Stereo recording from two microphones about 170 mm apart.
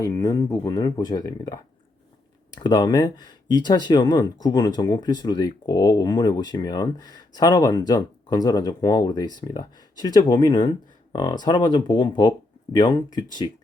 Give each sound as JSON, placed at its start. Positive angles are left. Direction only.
{"t": 0.0, "sound": "speech", "side_deg": 20}
{"t": 2.6, "sound": "speech", "side_deg": 25}